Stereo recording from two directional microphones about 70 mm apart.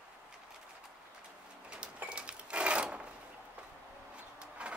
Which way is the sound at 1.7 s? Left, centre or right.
Centre.